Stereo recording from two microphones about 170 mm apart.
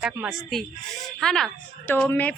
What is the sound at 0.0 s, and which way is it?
Speech, 5° right (ahead or behind).